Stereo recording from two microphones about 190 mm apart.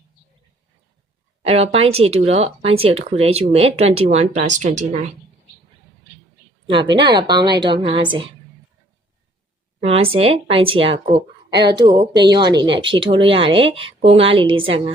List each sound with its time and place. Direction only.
1.4 s speech: 30° right (ahead or behind)
6.7 s a woman's voice: 25° right (ahead or behind)
9.8 s a woman's voice: 30° right (ahead or behind)